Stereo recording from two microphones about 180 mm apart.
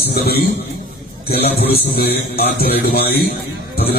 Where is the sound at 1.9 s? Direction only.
60° left (ahead or behind).